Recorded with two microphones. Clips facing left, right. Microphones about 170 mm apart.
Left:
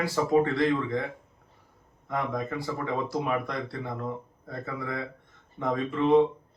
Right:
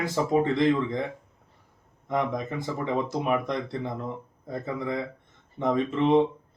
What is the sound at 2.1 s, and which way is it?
Speech, 20° right (ahead or behind).